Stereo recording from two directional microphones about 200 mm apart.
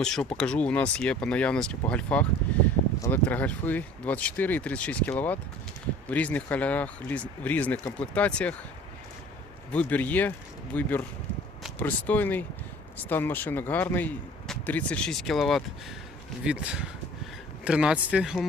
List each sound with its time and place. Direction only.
0.0 s speech: 5° left (ahead or behind)
9.7 s speech: 10° left (ahead or behind)